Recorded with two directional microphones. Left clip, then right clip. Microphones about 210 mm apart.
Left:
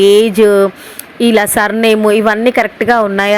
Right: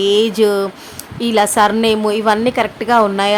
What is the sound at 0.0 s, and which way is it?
A woman's voice, 20° left (ahead or behind).